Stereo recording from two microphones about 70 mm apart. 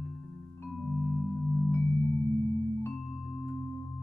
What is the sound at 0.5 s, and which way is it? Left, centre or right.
Music, left.